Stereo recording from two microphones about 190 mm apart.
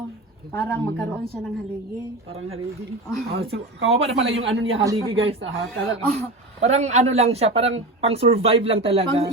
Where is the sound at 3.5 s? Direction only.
90° right.